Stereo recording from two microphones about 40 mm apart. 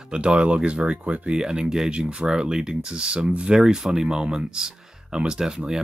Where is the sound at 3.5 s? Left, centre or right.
Centre.